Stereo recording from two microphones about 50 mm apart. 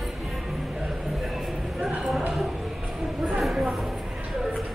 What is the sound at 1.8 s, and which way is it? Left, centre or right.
Clip-clop, right.